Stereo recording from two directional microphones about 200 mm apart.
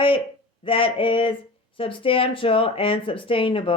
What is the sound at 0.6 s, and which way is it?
Speech, 25° left (ahead or behind).